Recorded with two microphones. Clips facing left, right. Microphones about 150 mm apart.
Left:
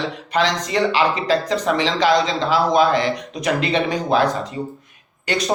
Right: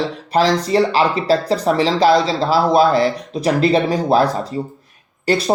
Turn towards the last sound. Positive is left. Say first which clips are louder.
# right 5 dB
turn(degrees=-35)  # may be behind; listen again after turning